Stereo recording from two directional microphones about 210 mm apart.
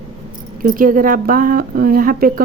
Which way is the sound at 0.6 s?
40° right (ahead or behind).